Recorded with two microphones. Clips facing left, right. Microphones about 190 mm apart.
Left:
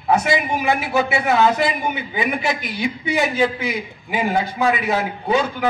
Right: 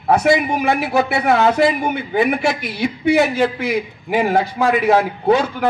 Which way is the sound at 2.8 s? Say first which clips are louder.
Right 7 dB; 70° right (ahead or behind).